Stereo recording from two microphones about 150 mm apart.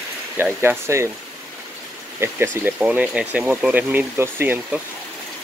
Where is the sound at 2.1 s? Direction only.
15° right (ahead or behind).